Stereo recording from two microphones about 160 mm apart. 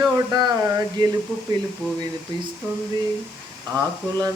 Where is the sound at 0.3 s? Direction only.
25° right (ahead or behind).